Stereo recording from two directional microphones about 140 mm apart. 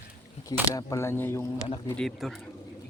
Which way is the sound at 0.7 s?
20° left (ahead or behind).